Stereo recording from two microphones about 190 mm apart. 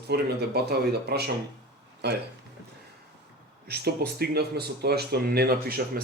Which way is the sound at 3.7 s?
55° right (ahead or behind).